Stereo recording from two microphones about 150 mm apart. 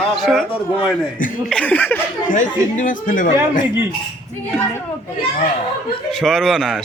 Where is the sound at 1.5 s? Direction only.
10° left (ahead or behind).